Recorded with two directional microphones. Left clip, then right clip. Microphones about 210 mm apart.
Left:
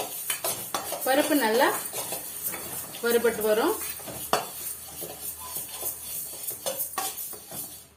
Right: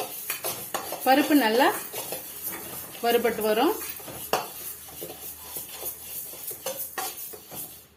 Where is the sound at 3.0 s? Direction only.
30° right (ahead or behind).